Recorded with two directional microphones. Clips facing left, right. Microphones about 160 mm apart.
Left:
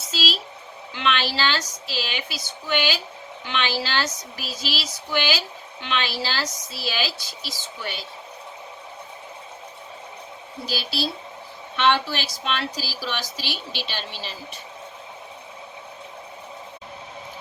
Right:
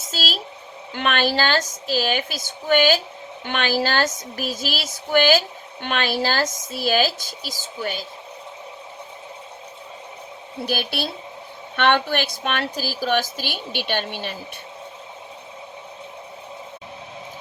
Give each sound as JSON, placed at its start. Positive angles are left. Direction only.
{"t": 0.1, "sound": "speech", "side_deg": -45}
{"t": 10.7, "sound": "a woman's voice", "side_deg": -55}